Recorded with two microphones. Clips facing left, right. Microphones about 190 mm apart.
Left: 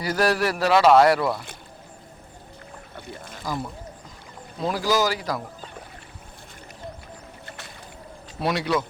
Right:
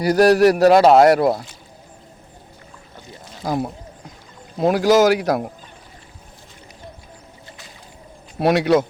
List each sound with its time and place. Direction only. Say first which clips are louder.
0.0 s speech: right 10 dB; 40° right (ahead or behind)
3.4 s speech: right 8 dB; 55° right (ahead or behind)
7.4 s boat: left 1 dB; 60° left (ahead or behind)
8.4 s speech: right 8 dB; 60° right (ahead or behind)